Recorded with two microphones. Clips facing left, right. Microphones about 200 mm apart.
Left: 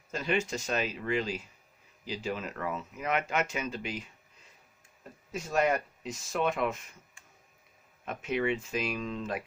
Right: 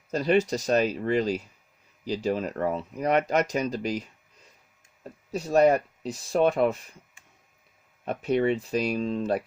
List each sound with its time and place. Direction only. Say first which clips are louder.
0.1 s speech: right 8 dB; 40° right (ahead or behind)
5.3 s speech: right 8 dB; 35° right (ahead or behind)
8.0 s speech: right 7 dB; 35° right (ahead or behind)